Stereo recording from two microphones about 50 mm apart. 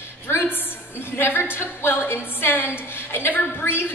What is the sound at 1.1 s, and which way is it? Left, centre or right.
A woman's voice, left.